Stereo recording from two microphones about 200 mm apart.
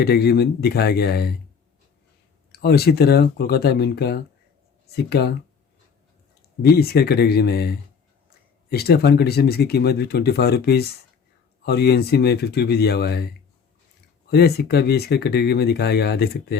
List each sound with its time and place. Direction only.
0.0 s speech: 55° left (ahead or behind)
2.5 s speech: 55° left (ahead or behind)
6.6 s speech: 50° left (ahead or behind)